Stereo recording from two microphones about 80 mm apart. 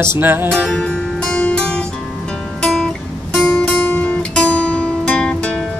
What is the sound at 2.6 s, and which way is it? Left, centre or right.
Guitar, centre.